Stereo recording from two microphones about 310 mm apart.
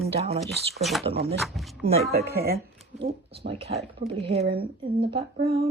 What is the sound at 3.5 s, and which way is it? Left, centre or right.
Speech, centre.